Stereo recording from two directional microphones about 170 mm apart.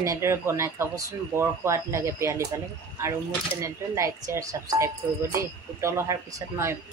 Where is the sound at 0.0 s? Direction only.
15° right (ahead or behind).